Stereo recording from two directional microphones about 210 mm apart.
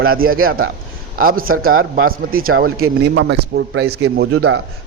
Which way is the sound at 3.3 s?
55° right (ahead or behind).